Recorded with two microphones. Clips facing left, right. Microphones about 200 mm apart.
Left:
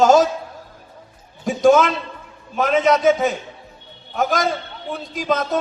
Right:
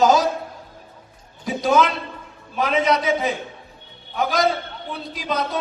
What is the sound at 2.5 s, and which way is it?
A man's voice, 50° left (ahead or behind).